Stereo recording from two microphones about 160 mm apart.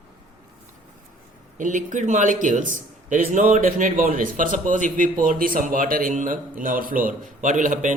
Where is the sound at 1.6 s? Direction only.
55° right (ahead or behind).